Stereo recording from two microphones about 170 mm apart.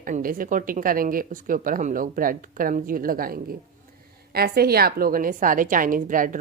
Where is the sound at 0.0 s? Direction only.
55° right (ahead or behind).